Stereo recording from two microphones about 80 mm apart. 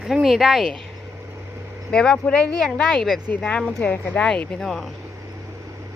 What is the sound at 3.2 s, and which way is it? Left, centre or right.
Speech, centre.